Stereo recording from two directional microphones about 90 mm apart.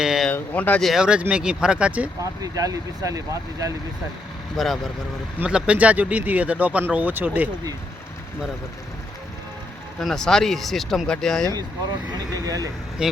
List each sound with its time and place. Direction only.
0.0 s speech: 5° right (ahead or behind)
0.3 s speech: 20° left (ahead or behind)
0.8 s speech: centre (ahead or behind)
1.0 s speech: 10° right (ahead or behind)
2.4 s speech: 40° right (ahead or behind)
4.5 s speech: centre (ahead or behind)
5.5 s speech: 10° right (ahead or behind)
10.0 s speech: 5° left (ahead or behind)
12.1 s speech: 45° right (ahead or behind)
13.0 s speech: 10° right (ahead or behind)